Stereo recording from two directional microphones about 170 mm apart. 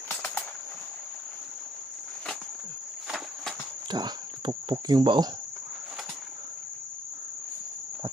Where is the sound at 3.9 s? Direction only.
25° right (ahead or behind).